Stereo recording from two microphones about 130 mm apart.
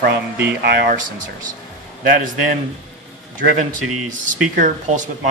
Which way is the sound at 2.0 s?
90° right.